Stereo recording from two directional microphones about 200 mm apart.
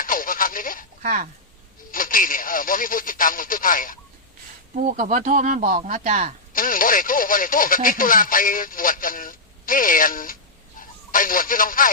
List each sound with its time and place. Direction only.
0.0 s a sound: 45° left (ahead or behind)
1.0 s speech: 45° right (ahead or behind)
1.9 s speech: 45° left (ahead or behind)
4.7 s speech: 40° right (ahead or behind)
6.5 s speech: 45° left (ahead or behind)